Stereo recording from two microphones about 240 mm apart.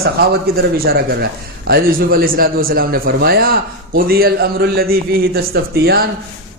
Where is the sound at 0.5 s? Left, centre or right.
Right.